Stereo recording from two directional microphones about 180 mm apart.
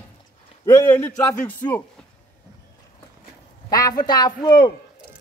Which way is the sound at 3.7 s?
20° left (ahead or behind).